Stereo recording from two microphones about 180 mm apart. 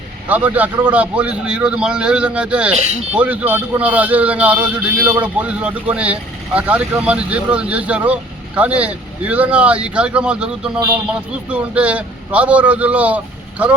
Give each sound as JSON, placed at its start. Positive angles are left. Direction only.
{"t": 0.3, "sound": "speech", "side_deg": -10}
{"t": 2.7, "sound": "speech", "side_deg": -40}
{"t": 3.1, "sound": "speech", "side_deg": -10}